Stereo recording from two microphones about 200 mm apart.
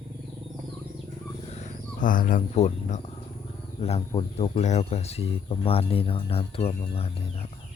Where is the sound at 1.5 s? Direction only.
35° left (ahead or behind).